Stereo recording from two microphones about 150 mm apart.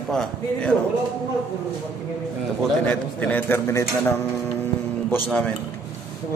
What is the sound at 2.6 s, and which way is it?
A man's voice, 10° left (ahead or behind).